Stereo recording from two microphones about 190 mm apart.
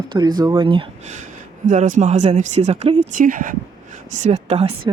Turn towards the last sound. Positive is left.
turn(degrees=-30)  # may be behind; listen again after turning